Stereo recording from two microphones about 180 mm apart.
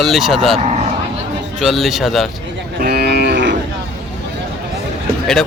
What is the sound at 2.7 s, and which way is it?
Livestock, 60° right (ahead or behind).